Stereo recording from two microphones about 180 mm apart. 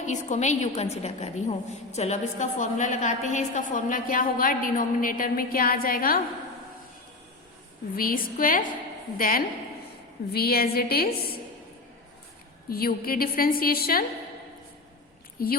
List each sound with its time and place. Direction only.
0.0 s a woman's voice: 40° left (ahead or behind)
7.9 s a woman's voice: 50° left (ahead or behind)
12.6 s a woman's voice: 55° left (ahead or behind)
15.4 s a woman's voice: 55° left (ahead or behind)